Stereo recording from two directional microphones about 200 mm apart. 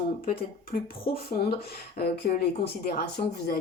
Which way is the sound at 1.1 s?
50° left (ahead or behind).